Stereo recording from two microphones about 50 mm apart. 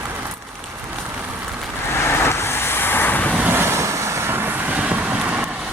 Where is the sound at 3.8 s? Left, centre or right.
Right.